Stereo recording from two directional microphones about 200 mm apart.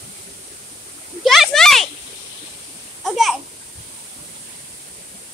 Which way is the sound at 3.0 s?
Centre (ahead or behind).